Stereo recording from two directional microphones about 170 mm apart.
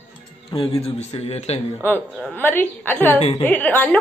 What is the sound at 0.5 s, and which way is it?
A man's voice, 25° left (ahead or behind).